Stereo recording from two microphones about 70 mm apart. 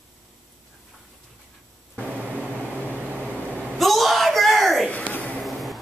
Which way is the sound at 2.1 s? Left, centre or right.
Right.